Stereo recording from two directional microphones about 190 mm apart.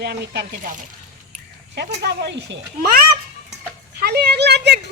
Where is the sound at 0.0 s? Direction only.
60° right (ahead or behind).